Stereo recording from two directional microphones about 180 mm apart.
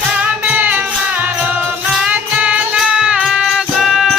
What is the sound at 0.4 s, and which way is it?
Music, 10° right (ahead or behind).